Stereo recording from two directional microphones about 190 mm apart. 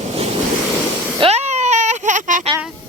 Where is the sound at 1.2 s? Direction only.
35° right (ahead or behind).